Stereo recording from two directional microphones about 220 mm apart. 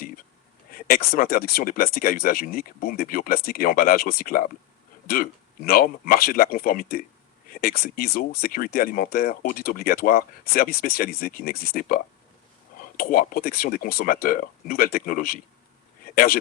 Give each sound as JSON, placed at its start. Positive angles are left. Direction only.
{"t": 0.7, "sound": "speech", "side_deg": 40}